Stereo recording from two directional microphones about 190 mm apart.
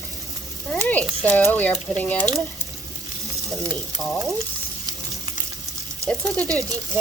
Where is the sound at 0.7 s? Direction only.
10° left (ahead or behind).